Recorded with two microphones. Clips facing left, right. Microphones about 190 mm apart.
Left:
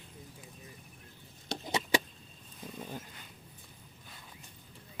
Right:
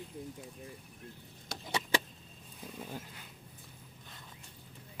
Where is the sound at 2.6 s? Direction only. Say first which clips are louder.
Left 1 dB; 5° right (ahead or behind).